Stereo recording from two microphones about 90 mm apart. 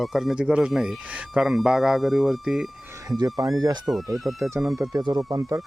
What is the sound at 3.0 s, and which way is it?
Speech, 45° right (ahead or behind).